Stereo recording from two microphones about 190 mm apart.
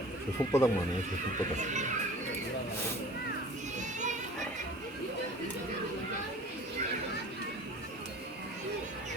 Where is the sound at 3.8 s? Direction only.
40° right (ahead or behind).